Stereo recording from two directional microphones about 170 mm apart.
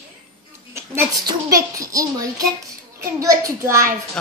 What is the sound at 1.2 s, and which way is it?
Speech, 20° right (ahead or behind).